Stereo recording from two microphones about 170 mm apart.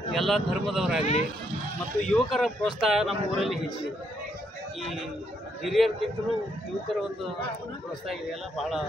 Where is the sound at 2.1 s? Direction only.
Centre (ahead or behind).